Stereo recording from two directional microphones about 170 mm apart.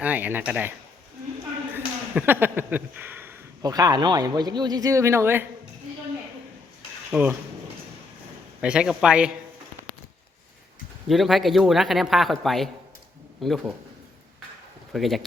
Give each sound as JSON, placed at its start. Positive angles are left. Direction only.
{"t": 0.0, "sound": "speech", "side_deg": -10}
{"t": 1.7, "sound": "speech", "side_deg": -10}
{"t": 3.6, "sound": "a man's voice", "side_deg": -20}
{"t": 7.1, "sound": "speech", "side_deg": -10}
{"t": 8.6, "sound": "speech", "side_deg": -5}
{"t": 11.1, "sound": "speech", "side_deg": 0}
{"t": 14.9, "sound": "speech", "side_deg": 0}